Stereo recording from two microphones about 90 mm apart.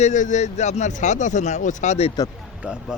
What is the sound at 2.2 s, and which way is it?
Speech, 45° left (ahead or behind).